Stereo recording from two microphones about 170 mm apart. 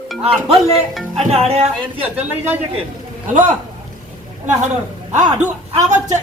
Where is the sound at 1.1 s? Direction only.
35° right (ahead or behind).